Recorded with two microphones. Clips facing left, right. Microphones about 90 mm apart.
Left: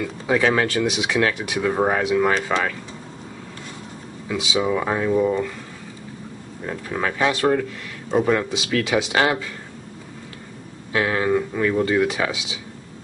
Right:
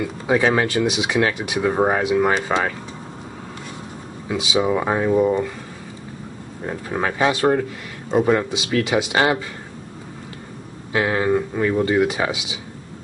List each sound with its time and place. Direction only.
0.3 s speech: 20° right (ahead or behind)
4.3 s speech: 25° right (ahead or behind)
6.6 s speech: 25° right (ahead or behind)
8.1 s speech: 15° right (ahead or behind)
10.9 s speech: 20° right (ahead or behind)